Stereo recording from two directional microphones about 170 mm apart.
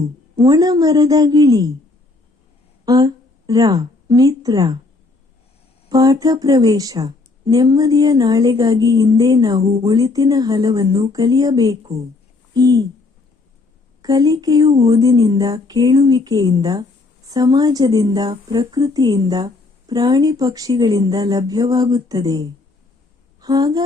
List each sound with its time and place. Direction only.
0.3 s a woman's voice: 20° right (ahead or behind)
2.8 s speech: 20° right (ahead or behind)
5.9 s a woman's voice: 20° right (ahead or behind)
14.0 s a woman's voice: 20° right (ahead or behind)